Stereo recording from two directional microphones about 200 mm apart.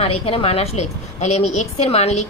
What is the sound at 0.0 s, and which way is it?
A woman's voice, 30° left (ahead or behind).